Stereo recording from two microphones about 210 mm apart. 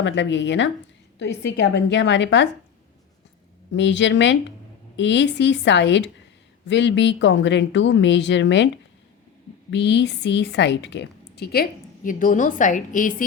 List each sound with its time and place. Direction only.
0.0 s speech: 60° left (ahead or behind)
3.7 s a woman's voice: 60° left (ahead or behind); by 13.2 s 40° left (ahead or behind)